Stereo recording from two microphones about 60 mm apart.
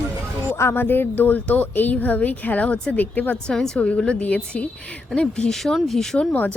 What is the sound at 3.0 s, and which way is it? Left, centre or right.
A woman's voice, left.